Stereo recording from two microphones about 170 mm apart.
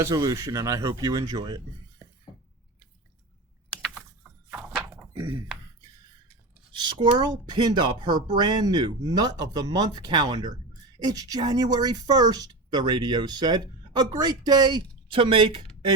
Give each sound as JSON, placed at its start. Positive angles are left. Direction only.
{"t": 0.0, "sound": "speech", "side_deg": -20}
{"t": 3.7, "sound": "a sound", "side_deg": 0}
{"t": 6.8, "sound": "speech", "side_deg": -25}